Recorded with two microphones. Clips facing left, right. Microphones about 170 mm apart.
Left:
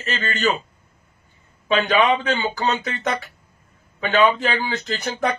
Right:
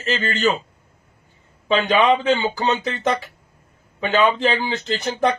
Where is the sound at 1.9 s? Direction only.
30° right (ahead or behind).